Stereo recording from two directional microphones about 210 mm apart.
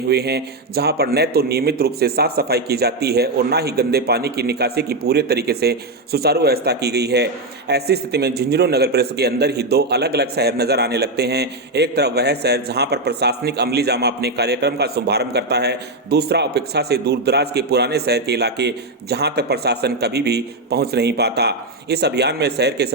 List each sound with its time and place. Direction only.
0.1 s a man's voice: 50° right (ahead or behind)